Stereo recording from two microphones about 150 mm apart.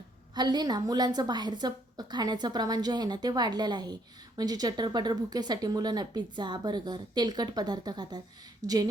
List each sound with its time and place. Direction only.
0.3 s speech: 30° right (ahead or behind)